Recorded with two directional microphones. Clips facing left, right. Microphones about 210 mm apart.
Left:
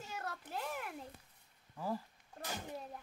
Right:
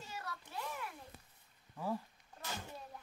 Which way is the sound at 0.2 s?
50° left (ahead or behind).